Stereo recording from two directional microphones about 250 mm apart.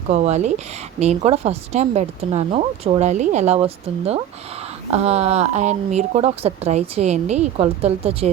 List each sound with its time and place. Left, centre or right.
0.1 s speech: right